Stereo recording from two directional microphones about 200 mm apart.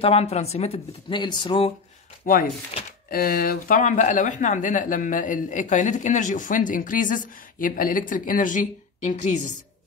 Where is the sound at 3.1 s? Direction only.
45° left (ahead or behind).